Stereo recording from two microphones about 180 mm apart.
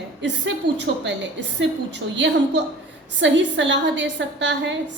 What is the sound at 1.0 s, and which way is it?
A woman's voice, 85° right.